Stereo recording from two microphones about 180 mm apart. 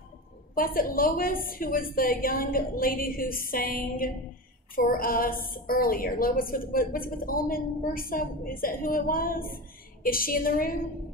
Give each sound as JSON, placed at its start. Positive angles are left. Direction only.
{"t": 0.6, "sound": "a woman's voice", "side_deg": 55}